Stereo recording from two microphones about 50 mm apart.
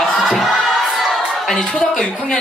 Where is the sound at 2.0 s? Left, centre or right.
Left.